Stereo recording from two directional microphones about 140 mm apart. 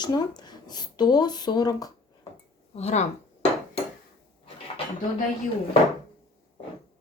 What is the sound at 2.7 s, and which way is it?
Speech, 50° left (ahead or behind).